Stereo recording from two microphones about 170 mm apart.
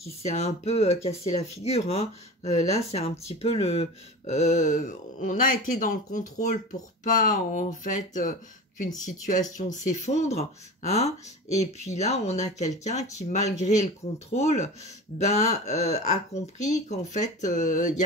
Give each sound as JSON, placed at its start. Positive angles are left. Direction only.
{"t": 0.0, "sound": "speech", "side_deg": 40}